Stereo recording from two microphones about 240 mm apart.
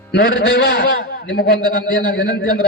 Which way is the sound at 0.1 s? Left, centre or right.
Left.